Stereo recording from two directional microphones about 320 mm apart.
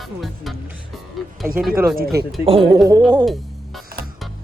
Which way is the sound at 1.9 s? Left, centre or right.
Right.